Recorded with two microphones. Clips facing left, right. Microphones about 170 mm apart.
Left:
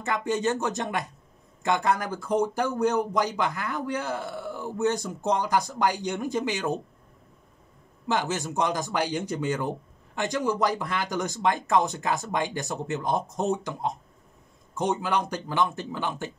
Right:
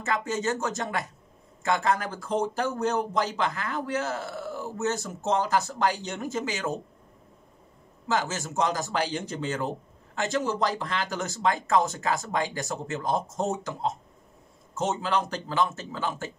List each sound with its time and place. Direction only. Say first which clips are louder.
0.0 s speech: left 2 dB; 20° left (ahead or behind)
8.1 s speech: left 1 dB; 15° left (ahead or behind)